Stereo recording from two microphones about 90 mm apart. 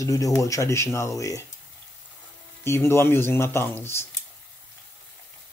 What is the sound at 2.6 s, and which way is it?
Speech, 30° left (ahead or behind).